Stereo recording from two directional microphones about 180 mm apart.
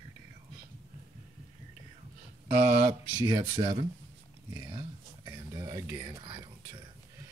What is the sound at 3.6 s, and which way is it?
Speech, 30° right (ahead or behind).